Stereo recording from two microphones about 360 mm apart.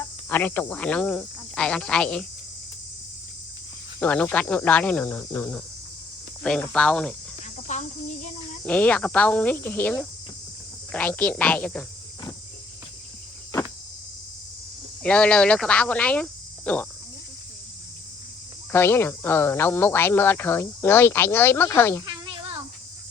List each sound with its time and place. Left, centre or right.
0.3 s speech: centre
4.0 s speech: centre
7.5 s cricket: centre
8.6 s speech: centre
15.0 s speech: centre
18.7 s speech: centre
22.0 s cat: centre